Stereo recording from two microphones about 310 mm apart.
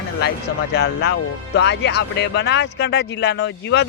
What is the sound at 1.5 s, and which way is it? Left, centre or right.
Speech, left.